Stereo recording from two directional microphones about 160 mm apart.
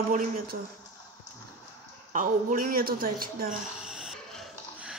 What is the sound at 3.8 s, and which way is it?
Music, 5° right (ahead or behind).